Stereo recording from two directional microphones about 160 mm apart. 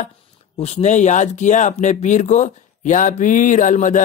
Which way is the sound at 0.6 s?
40° left (ahead or behind).